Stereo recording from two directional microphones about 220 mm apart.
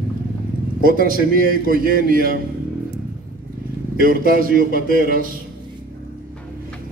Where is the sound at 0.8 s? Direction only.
40° right (ahead or behind).